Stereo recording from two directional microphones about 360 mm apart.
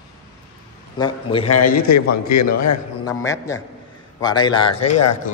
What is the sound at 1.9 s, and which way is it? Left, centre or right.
Speech, left.